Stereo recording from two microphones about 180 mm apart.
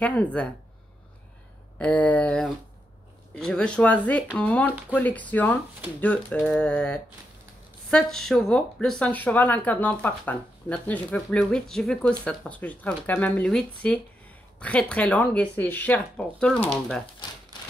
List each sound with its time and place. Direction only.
0.0 s speech: 5° left (ahead or behind)
1.8 s speech: 10° left (ahead or behind)
3.3 s a sound: 5° left (ahead or behind)
4.4 s speech: 10° left (ahead or behind)
5.9 s a sound: 10° left (ahead or behind)
7.9 s speech: centre (ahead or behind)
17.0 s typewriter: 25° left (ahead or behind)